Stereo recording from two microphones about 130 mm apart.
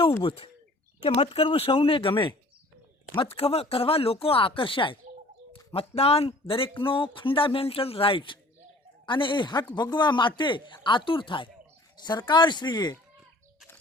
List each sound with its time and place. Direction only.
0.2 s speech: 45° left (ahead or behind)
5.7 s speech: 50° left (ahead or behind); by 13.0 s 30° left (ahead or behind)